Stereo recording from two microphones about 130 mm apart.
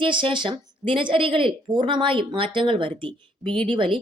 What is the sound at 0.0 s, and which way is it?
A woman's voice, 40° right (ahead or behind).